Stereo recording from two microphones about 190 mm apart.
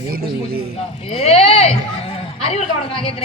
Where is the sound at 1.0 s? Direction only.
35° left (ahead or behind).